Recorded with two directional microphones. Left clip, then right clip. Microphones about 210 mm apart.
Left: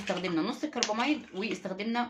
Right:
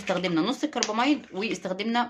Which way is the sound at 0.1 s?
35° right (ahead or behind).